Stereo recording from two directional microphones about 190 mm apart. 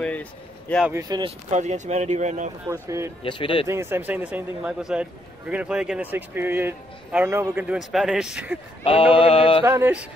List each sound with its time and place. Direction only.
0.0 s speech: 5° left (ahead or behind)
0.8 s speech: 15° right (ahead or behind)
1.5 s speech: 35° right (ahead or behind)
2.7 s a man's voice: 15° right (ahead or behind)
3.3 s mantra: 25° left (ahead or behind)
3.6 s a man's voice: 15° right (ahead or behind)
8.8 s mantra: 30° left (ahead or behind)
9.7 s a man's voice: 10° right (ahead or behind)